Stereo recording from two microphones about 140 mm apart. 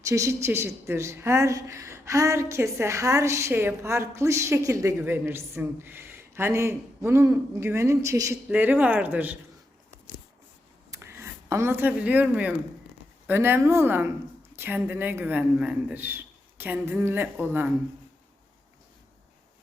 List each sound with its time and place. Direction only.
0.0 s a woman's voice: 20° right (ahead or behind)
10.9 s speech: 20° right (ahead or behind)